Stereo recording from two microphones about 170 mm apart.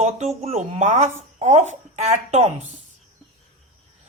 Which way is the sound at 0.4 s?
40° right (ahead or behind).